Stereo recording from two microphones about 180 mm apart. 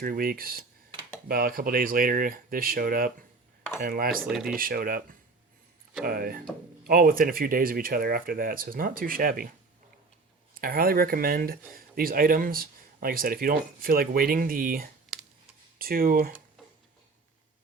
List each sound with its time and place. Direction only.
0.0 s speech: 55° right (ahead or behind)
4.3 s speech: centre (ahead or behind)
4.5 s speech: 55° right (ahead or behind)
6.1 s speech: 55° right (ahead or behind)
10.5 s speech: 55° right (ahead or behind)